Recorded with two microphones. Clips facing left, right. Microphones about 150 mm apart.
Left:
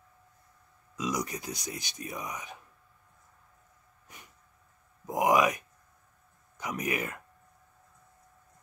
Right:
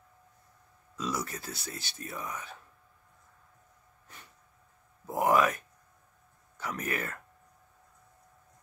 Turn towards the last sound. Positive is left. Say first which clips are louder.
# left 2 dB
turn(degrees=15)  # may be behind; listen again after turning